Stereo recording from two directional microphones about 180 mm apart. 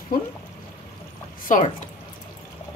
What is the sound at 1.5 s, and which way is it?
Speech, 45° left (ahead or behind).